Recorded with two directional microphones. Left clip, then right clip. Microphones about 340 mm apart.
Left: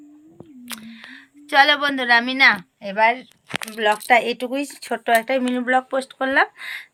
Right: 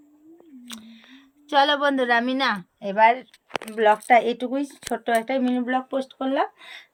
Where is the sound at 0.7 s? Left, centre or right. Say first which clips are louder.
Left 8 dB; centre.